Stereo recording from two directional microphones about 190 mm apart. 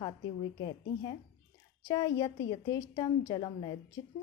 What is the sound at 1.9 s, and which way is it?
A woman's voice, 20° left (ahead or behind).